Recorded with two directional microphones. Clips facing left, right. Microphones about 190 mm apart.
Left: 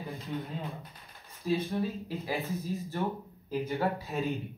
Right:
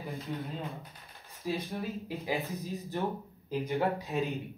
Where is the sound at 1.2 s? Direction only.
15° right (ahead or behind).